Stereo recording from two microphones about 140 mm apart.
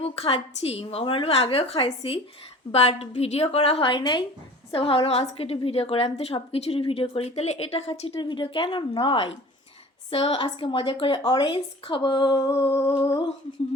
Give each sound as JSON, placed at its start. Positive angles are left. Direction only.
{"t": 0.0, "sound": "a woman's voice", "side_deg": 45}
{"t": 13.0, "sound": "humming", "side_deg": 25}